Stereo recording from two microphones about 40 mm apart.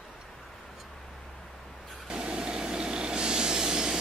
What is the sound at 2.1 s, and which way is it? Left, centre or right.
Sawing, right.